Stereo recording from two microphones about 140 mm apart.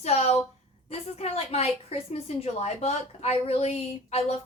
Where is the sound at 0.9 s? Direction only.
50° left (ahead or behind).